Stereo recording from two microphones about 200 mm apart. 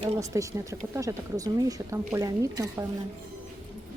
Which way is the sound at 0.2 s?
15° right (ahead or behind).